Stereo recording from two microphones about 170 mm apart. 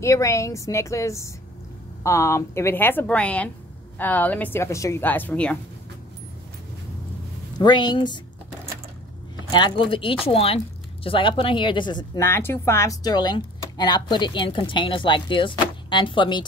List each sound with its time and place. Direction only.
0.0 s speech: 15° left (ahead or behind)
7.5 s speech: 25° left (ahead or behind)
9.5 s speech: 25° left (ahead or behind)
12.2 s speech: 15° left (ahead or behind)